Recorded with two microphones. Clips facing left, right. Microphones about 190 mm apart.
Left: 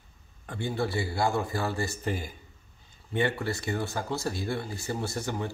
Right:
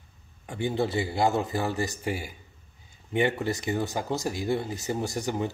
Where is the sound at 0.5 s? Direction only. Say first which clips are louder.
Right 3 dB; 20° right (ahead or behind).